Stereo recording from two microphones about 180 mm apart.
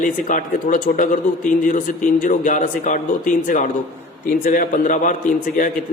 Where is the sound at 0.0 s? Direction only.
45° left (ahead or behind).